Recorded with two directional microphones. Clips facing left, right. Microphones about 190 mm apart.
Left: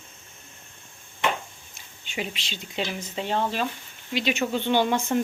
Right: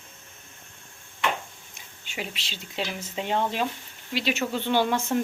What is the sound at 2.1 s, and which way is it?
Speech, centre (ahead or behind).